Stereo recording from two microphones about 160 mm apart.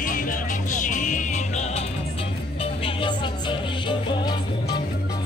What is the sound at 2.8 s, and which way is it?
Music, 30° left (ahead or behind).